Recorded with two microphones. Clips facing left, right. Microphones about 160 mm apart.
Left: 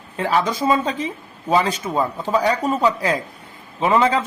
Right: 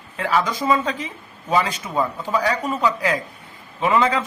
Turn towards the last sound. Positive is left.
turn(degrees=30)  # may be behind; listen again after turning